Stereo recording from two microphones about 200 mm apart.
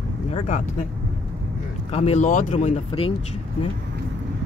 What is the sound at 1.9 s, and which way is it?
Speech, 35° left (ahead or behind).